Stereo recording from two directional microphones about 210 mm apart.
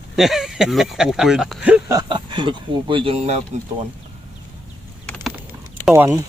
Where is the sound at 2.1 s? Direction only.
20° right (ahead or behind).